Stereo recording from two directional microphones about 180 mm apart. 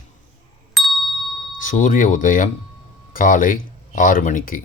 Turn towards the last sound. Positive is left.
turn(degrees=50)  # may be behind; listen again after turning